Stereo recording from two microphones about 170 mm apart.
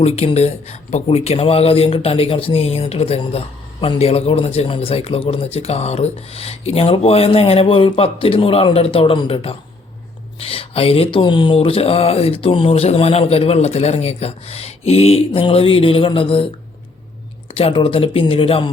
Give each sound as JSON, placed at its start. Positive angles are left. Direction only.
{"t": 0.0, "sound": "speech", "side_deg": 40}
{"t": 17.5, "sound": "speech", "side_deg": 35}